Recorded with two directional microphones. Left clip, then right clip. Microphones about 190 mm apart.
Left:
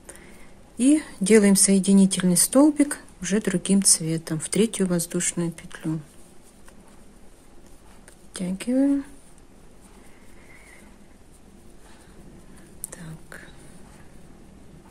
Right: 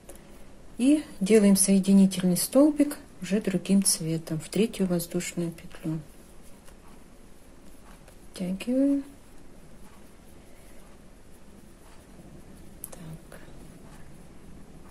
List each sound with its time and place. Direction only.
0.7 s a woman's voice: 25° left (ahead or behind)
8.3 s speech: 20° left (ahead or behind)